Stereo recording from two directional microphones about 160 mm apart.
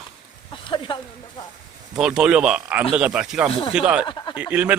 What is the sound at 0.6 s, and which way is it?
Speech, 30° left (ahead or behind).